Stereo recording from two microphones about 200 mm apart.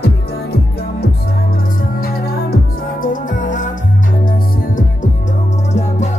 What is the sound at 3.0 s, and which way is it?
Music, 40° left (ahead or behind).